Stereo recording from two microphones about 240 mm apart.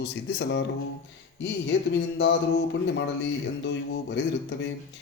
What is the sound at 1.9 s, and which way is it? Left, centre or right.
Speech, left.